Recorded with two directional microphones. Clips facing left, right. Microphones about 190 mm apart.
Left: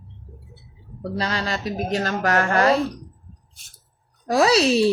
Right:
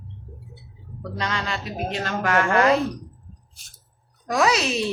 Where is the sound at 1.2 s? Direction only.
35° left (ahead or behind).